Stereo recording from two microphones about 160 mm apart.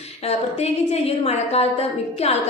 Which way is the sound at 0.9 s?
40° left (ahead or behind).